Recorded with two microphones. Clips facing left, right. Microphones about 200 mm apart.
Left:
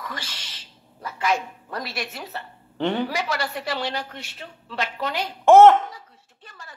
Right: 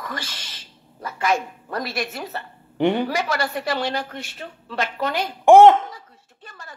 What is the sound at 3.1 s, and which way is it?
A man's voice, 50° right (ahead or behind).